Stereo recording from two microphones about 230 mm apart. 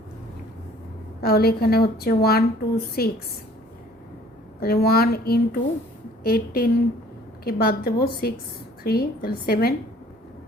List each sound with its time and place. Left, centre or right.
1.2 s a woman's voice: left
4.6 s a woman's voice: left